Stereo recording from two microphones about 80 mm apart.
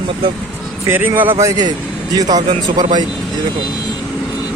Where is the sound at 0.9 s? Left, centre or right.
Right.